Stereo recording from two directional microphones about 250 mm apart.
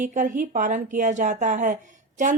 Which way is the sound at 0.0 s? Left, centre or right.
Right.